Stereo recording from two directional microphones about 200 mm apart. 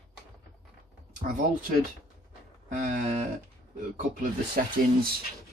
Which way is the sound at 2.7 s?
40° right (ahead or behind).